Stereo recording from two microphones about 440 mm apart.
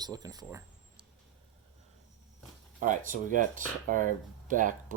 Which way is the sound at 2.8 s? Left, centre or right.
Centre.